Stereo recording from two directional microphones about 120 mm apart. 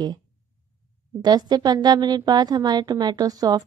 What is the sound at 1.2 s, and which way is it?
A woman's voice, 35° right (ahead or behind).